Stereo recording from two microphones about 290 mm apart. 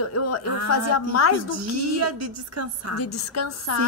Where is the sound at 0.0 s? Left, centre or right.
Left.